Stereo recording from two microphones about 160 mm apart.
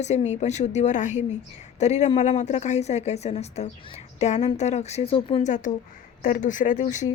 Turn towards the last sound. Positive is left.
turn(degrees=50)  # may be behind; listen again after turning